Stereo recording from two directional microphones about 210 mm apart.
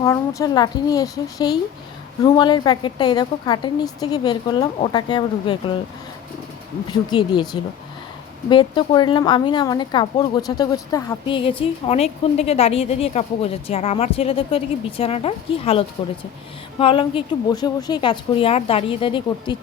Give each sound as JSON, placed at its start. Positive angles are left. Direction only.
{"t": 0.0, "sound": "a woman's voice", "side_deg": 15}
{"t": 6.9, "sound": "a woman's voice", "side_deg": 20}